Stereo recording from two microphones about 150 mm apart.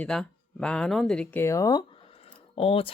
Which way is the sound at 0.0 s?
5° left (ahead or behind).